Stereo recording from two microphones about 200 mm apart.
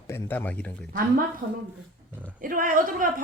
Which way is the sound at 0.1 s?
10° left (ahead or behind).